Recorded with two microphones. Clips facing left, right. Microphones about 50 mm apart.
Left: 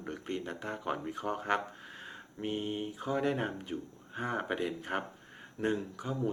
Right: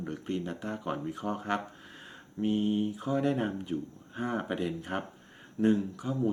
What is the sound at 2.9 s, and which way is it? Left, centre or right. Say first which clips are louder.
Speech: right 3 dB; centre.